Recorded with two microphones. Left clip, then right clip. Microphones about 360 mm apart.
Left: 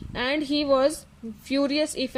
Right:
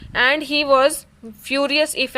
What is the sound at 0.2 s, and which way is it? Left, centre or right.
Speech, right.